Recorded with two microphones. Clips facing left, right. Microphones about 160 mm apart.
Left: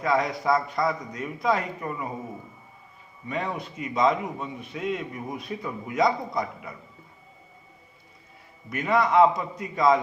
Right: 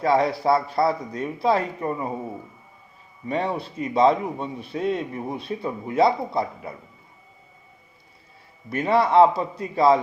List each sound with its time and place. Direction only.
0.0 s a man's voice: 30° right (ahead or behind)
3.2 s a man's voice: 35° right (ahead or behind)
8.7 s a man's voice: 30° right (ahead or behind)